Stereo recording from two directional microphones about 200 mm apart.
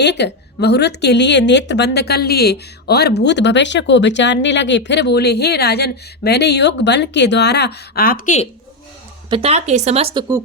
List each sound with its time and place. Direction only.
0.0 s a woman's voice: 60° left (ahead or behind); by 8.4 s 40° left (ahead or behind)
9.3 s speech: 30° right (ahead or behind)